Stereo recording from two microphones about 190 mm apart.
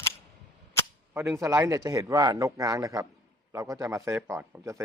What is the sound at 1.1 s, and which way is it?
Speech, 15° right (ahead or behind).